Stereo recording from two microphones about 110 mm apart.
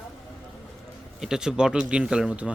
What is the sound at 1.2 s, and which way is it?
Speech, 5° right (ahead or behind).